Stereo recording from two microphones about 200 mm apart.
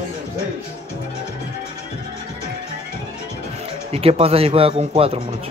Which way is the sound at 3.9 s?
30° right (ahead or behind).